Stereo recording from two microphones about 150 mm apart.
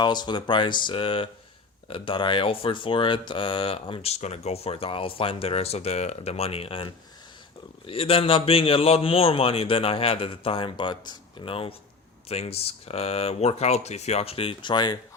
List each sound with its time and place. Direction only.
0.0 s speech: 30° left (ahead or behind)
7.9 s speech: 40° left (ahead or behind)